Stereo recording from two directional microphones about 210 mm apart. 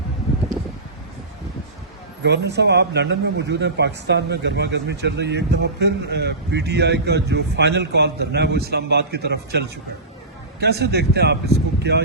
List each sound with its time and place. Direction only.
2.2 s speech: 55° right (ahead or behind)